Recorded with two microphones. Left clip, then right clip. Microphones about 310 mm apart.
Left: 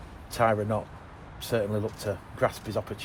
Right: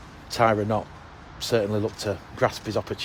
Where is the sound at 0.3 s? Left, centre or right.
Right.